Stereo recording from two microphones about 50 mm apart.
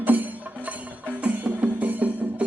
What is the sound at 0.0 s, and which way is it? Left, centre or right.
Music, right.